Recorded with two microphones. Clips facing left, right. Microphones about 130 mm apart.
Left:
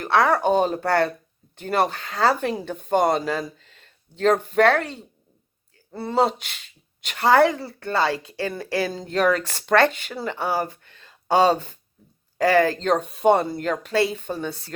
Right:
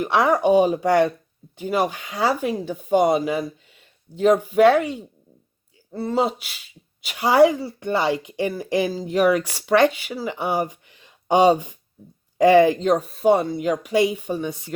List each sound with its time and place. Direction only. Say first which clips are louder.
0.0 s speech: right 1 dB; 15° right (ahead or behind)
5.9 s speech: left 1 dB; centre (ahead or behind); by 8.9 s 20° right (ahead or behind)
8.9 s speech: right 2 dB; 5° right (ahead or behind)